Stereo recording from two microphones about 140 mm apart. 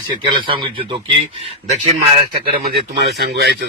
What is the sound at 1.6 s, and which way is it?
Speech, 55° right (ahead or behind).